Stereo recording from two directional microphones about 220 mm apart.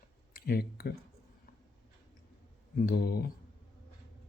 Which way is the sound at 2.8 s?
45° left (ahead or behind).